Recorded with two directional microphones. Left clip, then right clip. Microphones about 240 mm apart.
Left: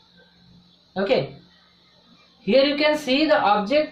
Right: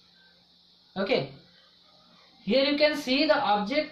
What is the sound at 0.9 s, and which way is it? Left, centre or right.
Speech, centre.